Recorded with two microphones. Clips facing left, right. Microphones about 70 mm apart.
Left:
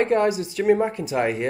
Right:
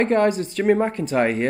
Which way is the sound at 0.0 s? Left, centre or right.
Right.